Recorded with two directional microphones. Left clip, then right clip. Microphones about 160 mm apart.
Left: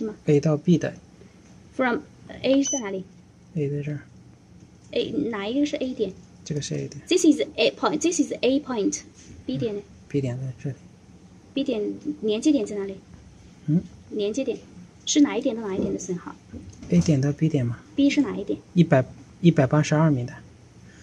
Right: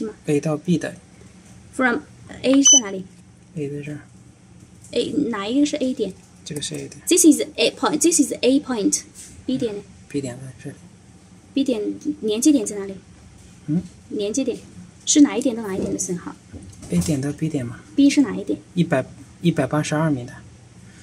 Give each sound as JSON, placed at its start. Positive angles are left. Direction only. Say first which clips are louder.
{"t": 0.2, "sound": "speech", "louder": "left 1 dB", "side_deg": 5}
{"t": 1.8, "sound": "speech", "louder": "right 4 dB", "side_deg": -10}
{"t": 3.5, "sound": "speech", "louder": "even", "side_deg": 5}
{"t": 4.9, "sound": "a woman's voice", "louder": "right 4 dB", "side_deg": -15}
{"t": 6.4, "sound": "speech", "louder": "right 1 dB", "side_deg": 5}
{"t": 7.1, "sound": "a woman's voice", "louder": "right 4 dB", "side_deg": -10}
{"t": 10.1, "sound": "speech", "louder": "even", "side_deg": 10}
{"t": 11.5, "sound": "a woman's voice", "louder": "right 4 dB", "side_deg": -15}
{"t": 14.1, "sound": "a woman's voice", "louder": "right 2 dB", "side_deg": -15}
{"t": 16.9, "sound": "speech", "louder": "even", "side_deg": 5}
{"t": 17.9, "sound": "a woman's voice", "louder": "right 5 dB", "side_deg": -15}
{"t": 18.8, "sound": "speech", "louder": "left 2 dB", "side_deg": 5}